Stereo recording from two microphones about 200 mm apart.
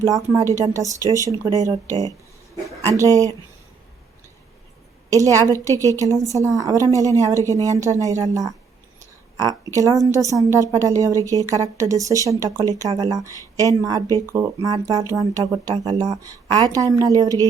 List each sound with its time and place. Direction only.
0.0 s speech: 15° right (ahead or behind)
5.6 s speech: 15° right (ahead or behind)
9.7 s a woman's voice: 15° right (ahead or behind)